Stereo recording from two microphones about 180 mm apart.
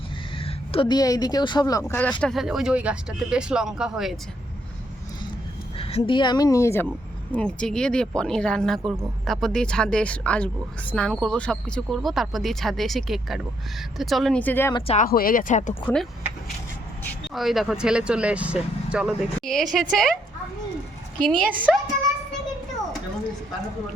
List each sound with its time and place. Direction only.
0.3 s speech: 30° left (ahead or behind)
1.9 s speech: 5° left (ahead or behind)
5.7 s a woman's voice: 30° left (ahead or behind); by 6.8 s 15° left (ahead or behind)
7.3 s speech: 5° left (ahead or behind)
14.7 s speech: 25° left (ahead or behind)
14.9 s speech: 50° left (ahead or behind)
17.3 s speech: centre (ahead or behind)
21.2 s speech: 5° left (ahead or behind)